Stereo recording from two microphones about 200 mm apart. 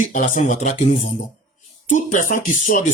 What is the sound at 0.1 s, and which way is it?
Speech, 40° left (ahead or behind).